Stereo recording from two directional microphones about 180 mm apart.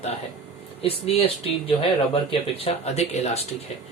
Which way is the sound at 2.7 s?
35° left (ahead or behind).